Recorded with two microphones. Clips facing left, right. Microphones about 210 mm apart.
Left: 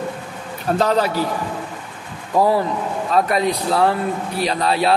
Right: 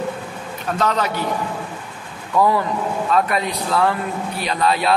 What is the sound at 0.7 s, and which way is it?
Speech, 35° left (ahead or behind).